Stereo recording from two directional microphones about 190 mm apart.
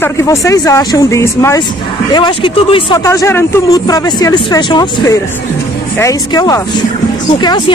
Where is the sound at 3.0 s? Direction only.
15° left (ahead or behind).